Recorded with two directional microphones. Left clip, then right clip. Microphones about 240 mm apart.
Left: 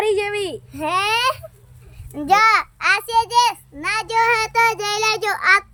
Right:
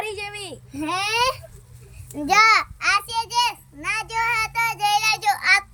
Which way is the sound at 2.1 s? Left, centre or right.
Centre.